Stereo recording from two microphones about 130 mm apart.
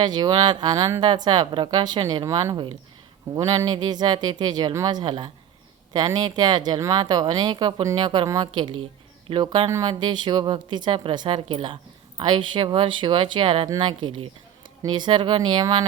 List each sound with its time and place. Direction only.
0.0 s a woman's voice: 35° right (ahead or behind)
9.6 s a woman's voice: 25° right (ahead or behind)